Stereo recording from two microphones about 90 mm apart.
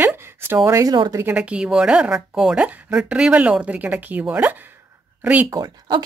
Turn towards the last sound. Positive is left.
turn(degrees=-55)  # may be behind; listen again after turning